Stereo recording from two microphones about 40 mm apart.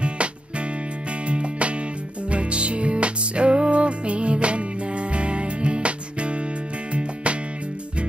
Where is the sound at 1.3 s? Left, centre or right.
Right.